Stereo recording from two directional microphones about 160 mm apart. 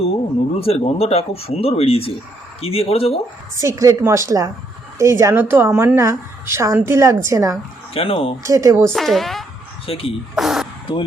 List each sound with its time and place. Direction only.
0.6 s speech: 40° left (ahead or behind)
3.5 s a woman's voice: 20° right (ahead or behind)
7.9 s speech: 35° left (ahead or behind)
8.4 s a woman's voice: 20° right (ahead or behind)
8.9 s a woman's voice: centre (ahead or behind)
9.8 s speech: 35° left (ahead or behind)
10.3 s a sound: centre (ahead or behind)